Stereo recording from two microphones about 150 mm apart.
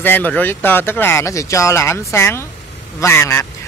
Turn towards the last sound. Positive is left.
turn(degrees=15)  # may be behind; listen again after turning